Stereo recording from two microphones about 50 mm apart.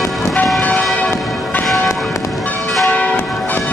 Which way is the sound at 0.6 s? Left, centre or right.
Left.